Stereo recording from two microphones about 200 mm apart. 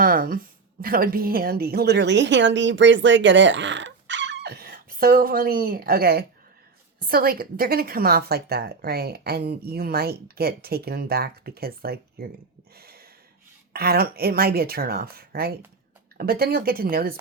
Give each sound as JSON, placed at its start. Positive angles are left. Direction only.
{"t": 0.0, "sound": "a woman's voice", "side_deg": -45}
{"t": 12.7, "sound": "a sound", "side_deg": -50}
{"t": 13.7, "sound": "a woman's voice", "side_deg": -50}